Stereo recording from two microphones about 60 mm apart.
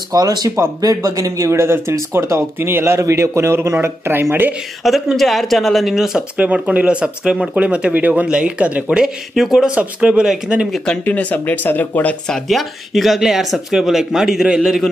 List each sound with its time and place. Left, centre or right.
0.1 s speech: right
1.0 s speech: right
3.0 s speech: right
4.8 s speech: centre
6.3 s speech: right; by 9.7 s centre
9.8 s speech: centre
11.1 s speech: left
12.3 s speech: centre